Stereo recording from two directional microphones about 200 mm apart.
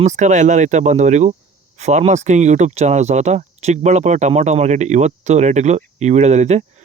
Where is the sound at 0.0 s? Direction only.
35° right (ahead or behind).